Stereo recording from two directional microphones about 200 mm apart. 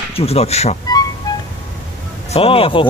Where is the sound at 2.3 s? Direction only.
30° left (ahead or behind).